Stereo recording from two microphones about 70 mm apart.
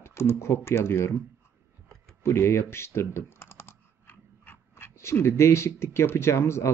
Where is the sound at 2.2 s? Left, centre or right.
Left.